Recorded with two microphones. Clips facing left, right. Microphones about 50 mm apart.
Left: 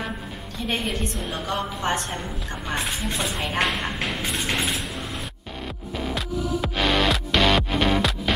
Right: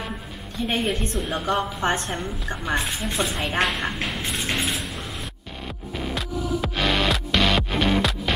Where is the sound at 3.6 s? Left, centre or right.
Centre.